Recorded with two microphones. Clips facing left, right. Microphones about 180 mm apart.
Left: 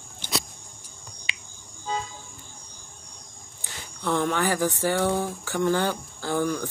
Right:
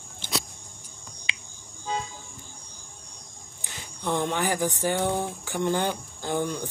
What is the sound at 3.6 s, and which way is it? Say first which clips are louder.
Speech: left 1 dB; 15° right (ahead or behind).